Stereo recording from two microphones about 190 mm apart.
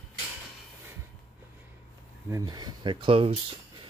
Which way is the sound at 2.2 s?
20° right (ahead or behind).